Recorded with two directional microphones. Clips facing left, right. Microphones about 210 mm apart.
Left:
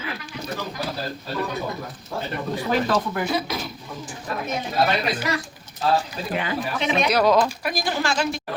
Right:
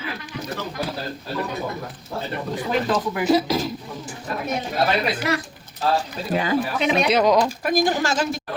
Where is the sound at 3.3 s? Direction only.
40° right (ahead or behind).